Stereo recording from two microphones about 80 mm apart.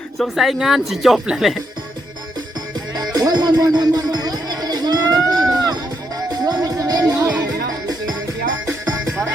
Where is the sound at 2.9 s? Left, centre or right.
Right.